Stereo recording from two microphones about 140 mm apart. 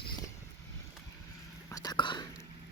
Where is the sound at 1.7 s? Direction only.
30° left (ahead or behind).